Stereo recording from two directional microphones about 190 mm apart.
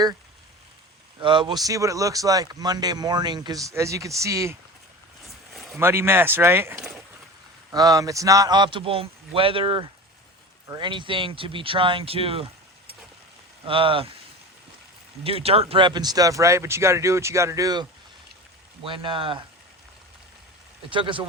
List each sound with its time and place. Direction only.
1.2 s speech: 25° right (ahead or behind)
5.2 s a sound: centre (ahead or behind)
5.8 s speech: 10° right (ahead or behind); by 12.5 s 30° right (ahead or behind)
13.7 s speech: 25° right (ahead or behind)
15.2 s speech: 30° right (ahead or behind)
20.9 s speech: 25° right (ahead or behind)